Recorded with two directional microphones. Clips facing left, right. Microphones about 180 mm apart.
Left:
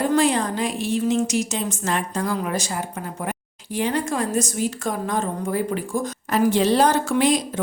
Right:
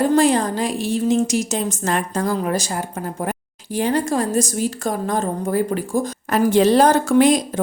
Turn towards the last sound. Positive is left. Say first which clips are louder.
# right 5 dB
turn(degrees=-45)  # may be behind; listen again after turning